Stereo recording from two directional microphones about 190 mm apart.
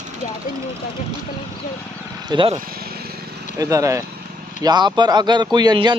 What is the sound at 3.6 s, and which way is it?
Speech, 15° right (ahead or behind).